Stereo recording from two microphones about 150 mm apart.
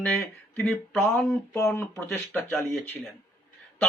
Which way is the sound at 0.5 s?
10° left (ahead or behind).